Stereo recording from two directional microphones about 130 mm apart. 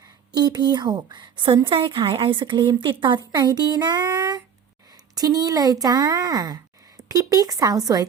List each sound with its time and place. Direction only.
0.3 s a woman's voice: 35° right (ahead or behind)